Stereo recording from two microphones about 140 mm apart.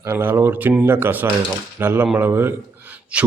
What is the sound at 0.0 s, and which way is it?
Speech, 15° right (ahead or behind).